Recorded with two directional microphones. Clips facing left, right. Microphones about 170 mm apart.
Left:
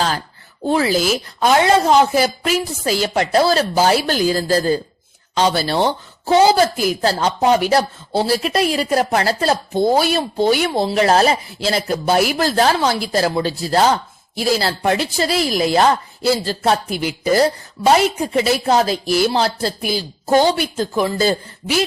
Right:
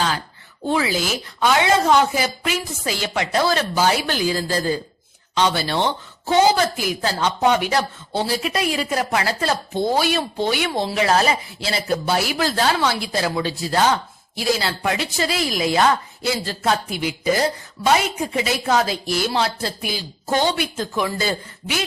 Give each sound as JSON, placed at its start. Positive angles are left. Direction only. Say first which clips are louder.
{"t": 0.6, "sound": "a woman's voice", "louder": "left 5 dB", "side_deg": 40}